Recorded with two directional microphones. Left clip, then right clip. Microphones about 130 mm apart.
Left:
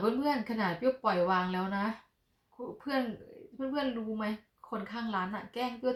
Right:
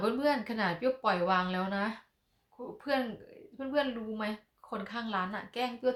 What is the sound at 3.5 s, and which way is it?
A woman's voice, 20° right (ahead or behind).